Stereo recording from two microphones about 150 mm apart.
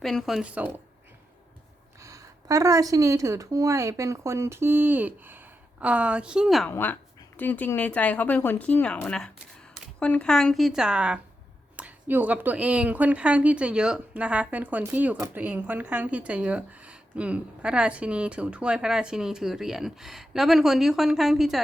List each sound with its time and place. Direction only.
0.0 s speech: centre (ahead or behind)
2.0 s speech: 20° right (ahead or behind); by 6.7 s centre (ahead or behind)
6.7 s speech: 10° left (ahead or behind)